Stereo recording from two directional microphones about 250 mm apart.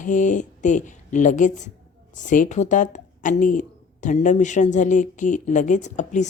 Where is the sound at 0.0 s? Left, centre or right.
Left.